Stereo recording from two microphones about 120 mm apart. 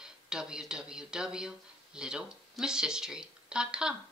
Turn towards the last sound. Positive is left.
turn(degrees=-5)  # may be behind; listen again after turning